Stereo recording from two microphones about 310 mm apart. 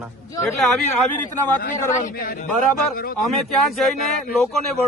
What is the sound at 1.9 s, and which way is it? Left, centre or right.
Speech, left.